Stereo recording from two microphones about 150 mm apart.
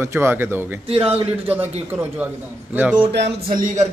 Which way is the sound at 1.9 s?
10° right (ahead or behind).